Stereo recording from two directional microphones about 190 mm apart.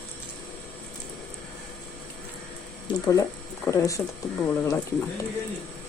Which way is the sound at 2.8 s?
15° left (ahead or behind).